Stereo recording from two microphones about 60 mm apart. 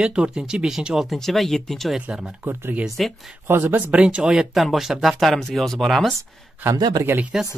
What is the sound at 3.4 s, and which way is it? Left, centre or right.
Speech, right.